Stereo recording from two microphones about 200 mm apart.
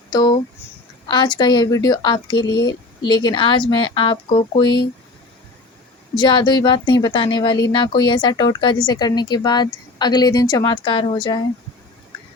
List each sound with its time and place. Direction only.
0.1 s a sound: 20° left (ahead or behind)
1.0 s speech: 20° left (ahead or behind)
6.1 s speech: 20° left (ahead or behind)